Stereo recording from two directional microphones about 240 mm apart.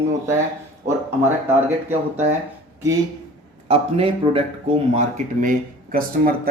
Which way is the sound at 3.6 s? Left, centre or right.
Right.